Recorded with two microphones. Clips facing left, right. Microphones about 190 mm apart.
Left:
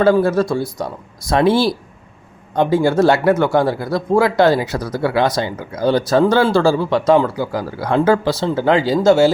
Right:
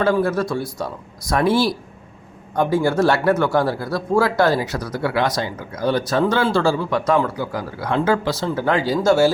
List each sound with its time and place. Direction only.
0.0 s speech: 30° left (ahead or behind)
2.7 s speech: 20° left (ahead or behind)